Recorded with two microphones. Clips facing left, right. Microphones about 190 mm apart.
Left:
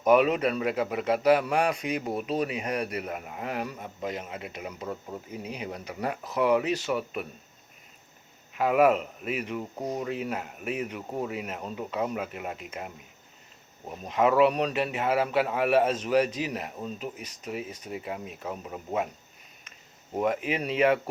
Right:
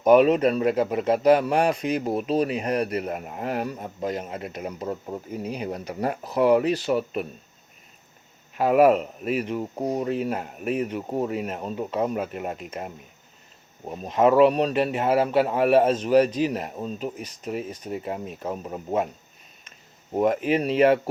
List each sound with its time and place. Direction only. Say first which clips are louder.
0.0 s a man's voice: right 5 dB; 35° right (ahead or behind)
8.5 s a man's voice: right 4 dB; 35° right (ahead or behind)
14.2 s a man's voice: right 5 dB; 35° right (ahead or behind)
20.1 s a man's voice: right 6 dB; 40° right (ahead or behind)